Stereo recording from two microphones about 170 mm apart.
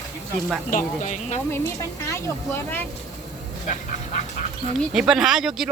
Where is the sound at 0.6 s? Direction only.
50° left (ahead or behind).